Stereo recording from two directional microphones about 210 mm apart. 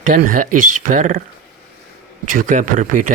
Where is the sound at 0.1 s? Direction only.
40° right (ahead or behind).